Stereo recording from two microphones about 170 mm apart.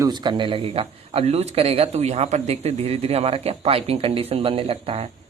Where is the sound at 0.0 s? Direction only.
25° right (ahead or behind).